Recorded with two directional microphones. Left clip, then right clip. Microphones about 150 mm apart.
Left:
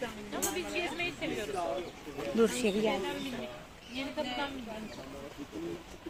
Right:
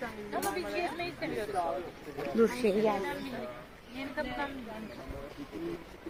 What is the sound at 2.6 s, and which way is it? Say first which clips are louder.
Speech: right 3 dB; 40° left (ahead or behind).